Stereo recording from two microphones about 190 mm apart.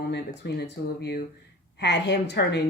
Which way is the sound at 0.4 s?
65° left (ahead or behind).